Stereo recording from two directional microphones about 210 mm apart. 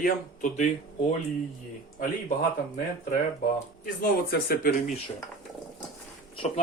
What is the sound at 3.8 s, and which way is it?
Speech, 45° left (ahead or behind).